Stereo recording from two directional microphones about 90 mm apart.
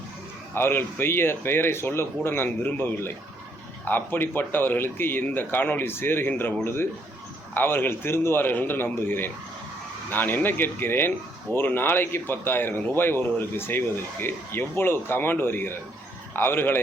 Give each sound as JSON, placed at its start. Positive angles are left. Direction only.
{"t": 0.5, "sound": "speech", "side_deg": 25}
{"t": 7.5, "sound": "speech", "side_deg": 25}